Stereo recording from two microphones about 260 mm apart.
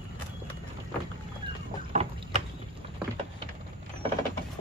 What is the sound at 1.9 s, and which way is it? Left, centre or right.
Vehicle, right.